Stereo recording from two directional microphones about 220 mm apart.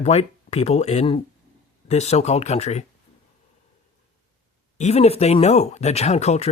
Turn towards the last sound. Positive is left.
turn(degrees=30)  # may be behind; listen again after turning